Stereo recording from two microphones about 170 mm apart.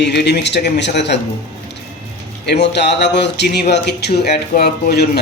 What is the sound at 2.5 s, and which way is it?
Speech, 85° left.